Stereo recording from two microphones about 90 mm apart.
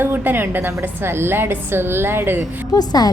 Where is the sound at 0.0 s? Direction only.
25° right (ahead or behind).